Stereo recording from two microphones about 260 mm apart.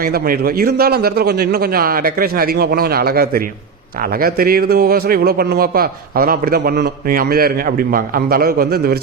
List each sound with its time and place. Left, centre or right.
0.0 s a man's voice: right